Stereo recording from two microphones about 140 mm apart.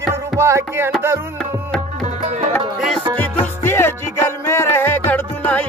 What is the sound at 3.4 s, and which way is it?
Music, 15° left (ahead or behind).